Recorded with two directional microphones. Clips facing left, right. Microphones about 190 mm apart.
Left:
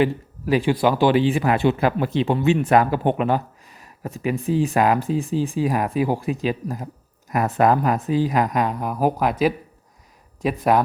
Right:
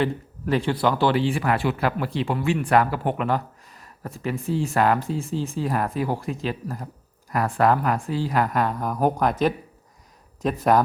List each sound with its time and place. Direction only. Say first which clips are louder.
0.5 s speech: left 3 dB; 10° left (ahead or behind)